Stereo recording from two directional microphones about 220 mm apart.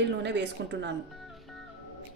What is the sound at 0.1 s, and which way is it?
Speech, 50° right (ahead or behind).